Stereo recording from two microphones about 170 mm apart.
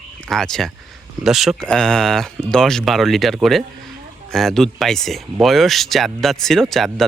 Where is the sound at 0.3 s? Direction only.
Centre (ahead or behind).